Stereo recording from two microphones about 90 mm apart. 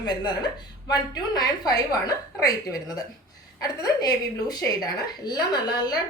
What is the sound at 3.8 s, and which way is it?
A woman's voice, 50° left (ahead or behind).